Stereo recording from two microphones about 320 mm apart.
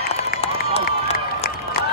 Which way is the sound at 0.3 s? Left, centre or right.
Centre.